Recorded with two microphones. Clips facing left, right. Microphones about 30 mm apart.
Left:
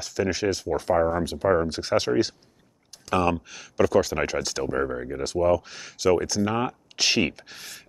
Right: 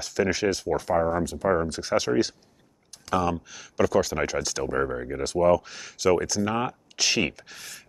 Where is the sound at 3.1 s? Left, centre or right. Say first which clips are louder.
Left 2 dB; centre.